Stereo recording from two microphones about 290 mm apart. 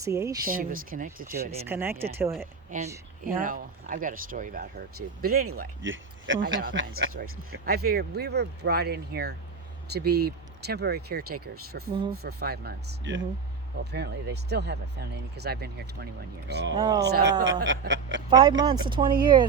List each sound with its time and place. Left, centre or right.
0.0 s speech: centre
0.4 s speech: right
1.6 s speech: centre
2.6 s speech: right
7.6 s speech: right
18.3 s speech: centre